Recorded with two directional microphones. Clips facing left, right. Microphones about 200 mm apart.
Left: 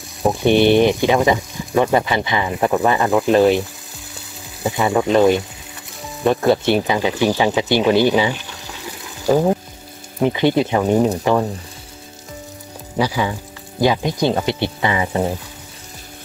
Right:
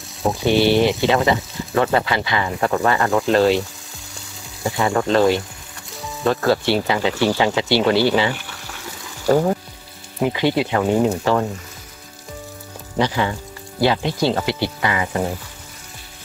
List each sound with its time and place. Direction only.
0.5 s speech: 20° left (ahead or behind)
4.6 s speech: 20° left (ahead or behind)
12.9 s speech: 10° left (ahead or behind)